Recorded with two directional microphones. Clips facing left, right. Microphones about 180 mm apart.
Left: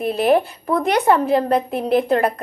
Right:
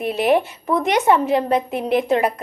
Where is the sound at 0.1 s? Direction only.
35° left (ahead or behind).